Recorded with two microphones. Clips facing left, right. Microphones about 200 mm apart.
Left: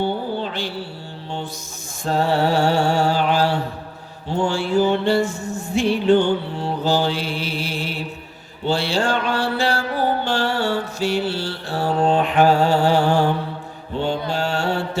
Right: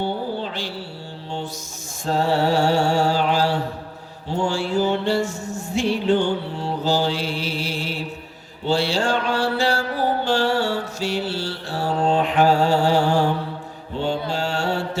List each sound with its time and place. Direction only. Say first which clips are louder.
0.0 s a sound: left 2 dB; 60° left (ahead or behind)
2.0 s mantra: left 1 dB; 55° left (ahead or behind)
4.3 s music: left 2 dB; 55° left (ahead or behind)
8.6 s mantra: even; 55° left (ahead or behind)